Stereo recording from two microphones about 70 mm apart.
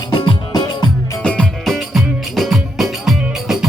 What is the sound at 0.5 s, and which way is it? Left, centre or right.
Music, left.